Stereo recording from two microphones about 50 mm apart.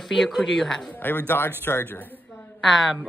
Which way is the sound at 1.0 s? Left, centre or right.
Left.